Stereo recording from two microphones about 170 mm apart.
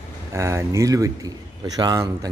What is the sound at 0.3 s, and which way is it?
A man's voice, 15° right (ahead or behind).